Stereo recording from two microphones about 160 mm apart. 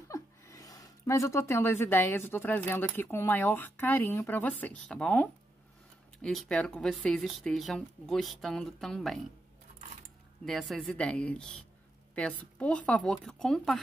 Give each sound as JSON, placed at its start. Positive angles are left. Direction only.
{"t": 0.1, "sound": "speech", "side_deg": 20}
{"t": 10.4, "sound": "speech", "side_deg": 0}